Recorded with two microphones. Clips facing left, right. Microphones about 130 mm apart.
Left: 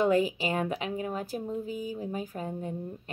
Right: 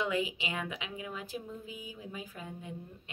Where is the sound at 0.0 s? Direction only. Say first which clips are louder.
Left 8 dB; 40° left (ahead or behind).